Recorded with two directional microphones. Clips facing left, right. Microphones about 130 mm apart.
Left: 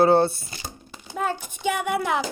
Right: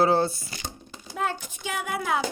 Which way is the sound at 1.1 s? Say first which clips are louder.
Left 2 dB; 45° left (ahead or behind).